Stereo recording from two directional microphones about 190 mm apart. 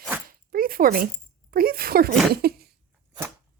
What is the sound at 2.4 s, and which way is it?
Cough, 55° right (ahead or behind).